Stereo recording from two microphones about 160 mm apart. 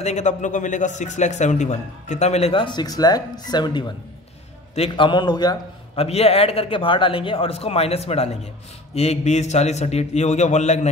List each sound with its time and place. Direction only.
0.0 s a man's voice: 45° left (ahead or behind); by 5.6 s 25° left (ahead or behind)
5.9 s a man's voice: 40° left (ahead or behind)